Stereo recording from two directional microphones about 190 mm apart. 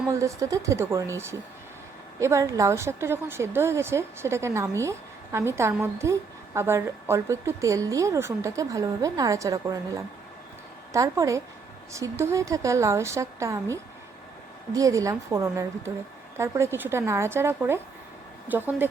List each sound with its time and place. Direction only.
0.1 s a woman's voice: 15° right (ahead or behind)
10.9 s a woman's voice: 15° right (ahead or behind)